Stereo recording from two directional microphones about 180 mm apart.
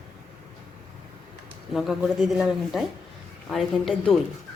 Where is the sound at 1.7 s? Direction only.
Centre (ahead or behind).